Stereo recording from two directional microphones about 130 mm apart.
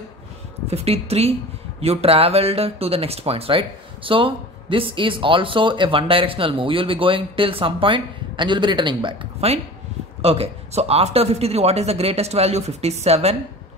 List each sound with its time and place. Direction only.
0.7 s speech: 50° right (ahead or behind)